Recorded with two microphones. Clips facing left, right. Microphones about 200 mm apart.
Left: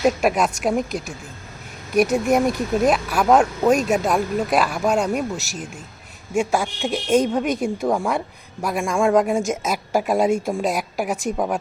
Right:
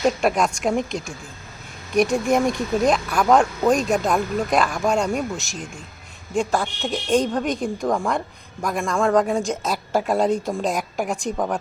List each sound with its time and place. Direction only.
0.0 s a woman's voice: 5° left (ahead or behind)